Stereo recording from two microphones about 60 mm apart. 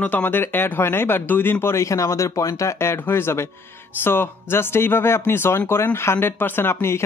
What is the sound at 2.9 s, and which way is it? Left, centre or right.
Speech, left.